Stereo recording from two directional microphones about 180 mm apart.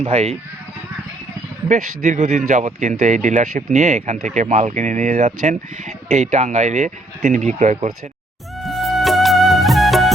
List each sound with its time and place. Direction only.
0.0 s speech: 35° right (ahead or behind)
1.6 s speech: 45° right (ahead or behind)
8.6 s music: centre (ahead or behind)